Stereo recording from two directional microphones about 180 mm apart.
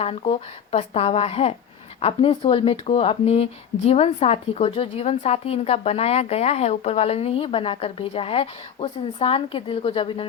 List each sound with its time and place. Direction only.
0.0 s speech: 35° left (ahead or behind)